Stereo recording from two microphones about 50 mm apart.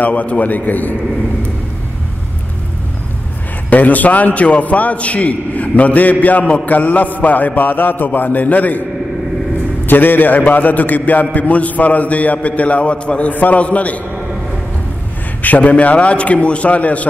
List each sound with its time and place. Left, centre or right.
0.0 s a man's voice: left
3.7 s a man's voice: left
9.8 s a man's voice: left
13.3 s a man's voice: left
15.4 s a man's voice: left